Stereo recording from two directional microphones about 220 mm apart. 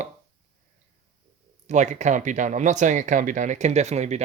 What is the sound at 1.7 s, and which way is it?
Speech, 30° right (ahead or behind).